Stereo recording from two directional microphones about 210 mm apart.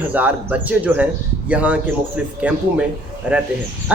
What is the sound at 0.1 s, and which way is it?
Speech, 5° right (ahead or behind).